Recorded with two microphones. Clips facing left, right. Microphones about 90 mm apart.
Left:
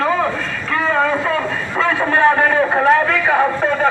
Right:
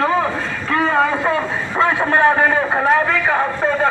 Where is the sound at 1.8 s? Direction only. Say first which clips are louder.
Even; 15° right (ahead or behind).